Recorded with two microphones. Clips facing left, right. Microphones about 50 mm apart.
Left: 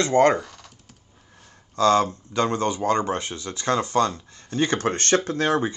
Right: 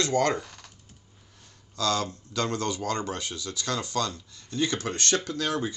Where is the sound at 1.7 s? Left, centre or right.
Left.